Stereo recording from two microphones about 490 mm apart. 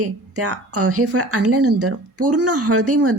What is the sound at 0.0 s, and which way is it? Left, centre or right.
Speech, right.